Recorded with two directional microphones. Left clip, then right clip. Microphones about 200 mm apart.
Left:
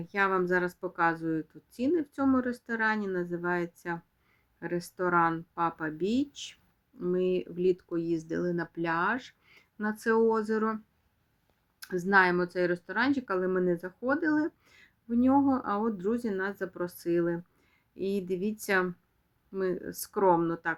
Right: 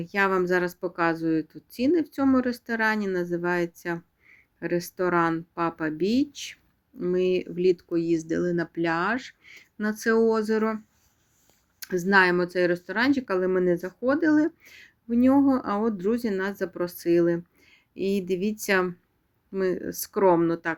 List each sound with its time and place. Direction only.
0.0 s speech: 25° right (ahead or behind)
11.8 s speech: 25° right (ahead or behind)